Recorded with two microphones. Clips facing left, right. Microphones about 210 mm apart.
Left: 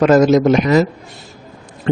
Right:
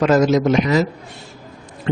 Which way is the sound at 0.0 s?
50° left (ahead or behind).